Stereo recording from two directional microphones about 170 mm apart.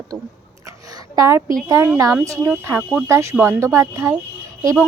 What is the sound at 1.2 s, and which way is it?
Speech, 15° right (ahead or behind).